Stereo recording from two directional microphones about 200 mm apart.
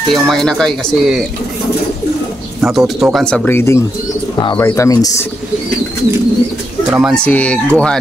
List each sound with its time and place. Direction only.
0.1 s speech: centre (ahead or behind)
2.6 s speech: centre (ahead or behind); by 5.2 s 15° left (ahead or behind)
6.9 s speech: 5° right (ahead or behind)
7.2 s speech: 5° left (ahead or behind)